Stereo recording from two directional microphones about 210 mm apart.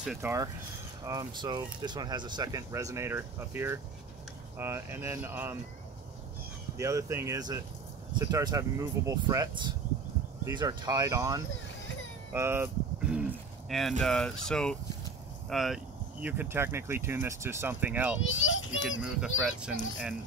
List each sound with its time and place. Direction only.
0.0 s speech: 5° right (ahead or behind)
6.8 s speech: 15° right (ahead or behind)
18.3 s a child's voice: 70° left (ahead or behind)
18.9 s a child's voice: 5° right (ahead or behind)